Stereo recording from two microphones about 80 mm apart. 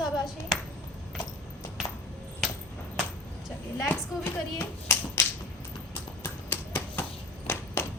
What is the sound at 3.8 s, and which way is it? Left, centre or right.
Speech, left.